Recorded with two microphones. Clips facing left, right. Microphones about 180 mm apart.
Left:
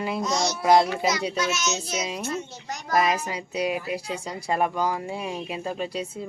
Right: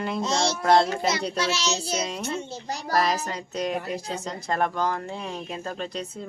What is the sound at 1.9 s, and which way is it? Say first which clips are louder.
Speech: right 1 dB; 5° left (ahead or behind).